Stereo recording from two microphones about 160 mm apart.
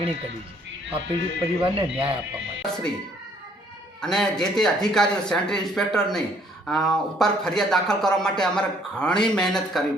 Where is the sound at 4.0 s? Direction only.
5° left (ahead or behind).